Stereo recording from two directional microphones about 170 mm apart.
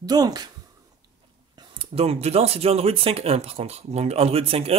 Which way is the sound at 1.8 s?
35° right (ahead or behind).